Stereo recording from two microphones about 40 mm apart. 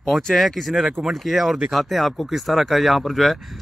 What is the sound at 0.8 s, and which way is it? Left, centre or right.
Speech, centre.